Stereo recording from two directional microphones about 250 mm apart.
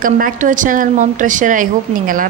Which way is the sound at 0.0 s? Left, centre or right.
Right.